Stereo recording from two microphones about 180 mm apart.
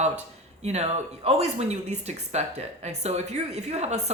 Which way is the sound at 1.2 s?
35° right (ahead or behind).